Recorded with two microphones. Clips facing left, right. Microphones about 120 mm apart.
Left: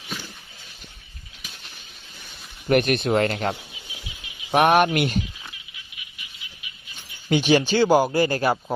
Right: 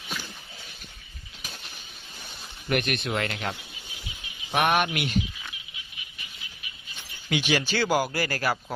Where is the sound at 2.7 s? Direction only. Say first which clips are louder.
Left 8 dB; 40° left (ahead or behind).